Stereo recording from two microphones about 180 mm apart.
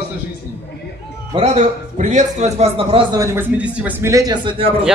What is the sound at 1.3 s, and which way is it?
A man's voice, 40° right (ahead or behind).